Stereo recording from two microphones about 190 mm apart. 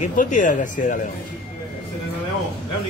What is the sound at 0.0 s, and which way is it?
Speech, 40° left (ahead or behind).